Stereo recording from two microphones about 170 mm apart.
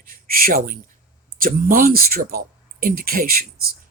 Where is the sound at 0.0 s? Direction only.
60° right (ahead or behind).